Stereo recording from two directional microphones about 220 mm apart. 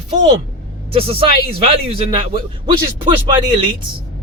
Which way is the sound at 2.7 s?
20° right (ahead or behind).